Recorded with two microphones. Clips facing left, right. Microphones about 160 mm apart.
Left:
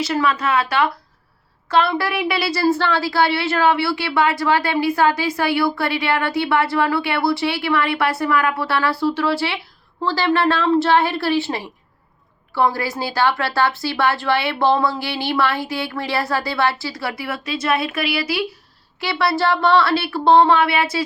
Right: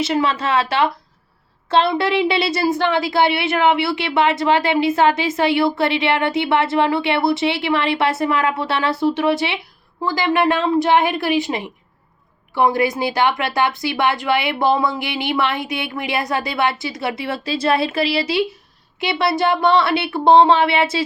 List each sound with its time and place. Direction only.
0.0 s a woman's voice: 25° right (ahead or behind)